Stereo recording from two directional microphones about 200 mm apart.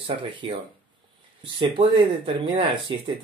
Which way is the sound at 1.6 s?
25° right (ahead or behind).